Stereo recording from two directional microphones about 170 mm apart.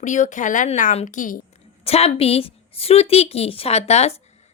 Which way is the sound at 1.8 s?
35° left (ahead or behind).